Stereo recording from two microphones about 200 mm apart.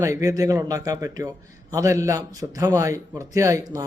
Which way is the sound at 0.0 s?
15° right (ahead or behind).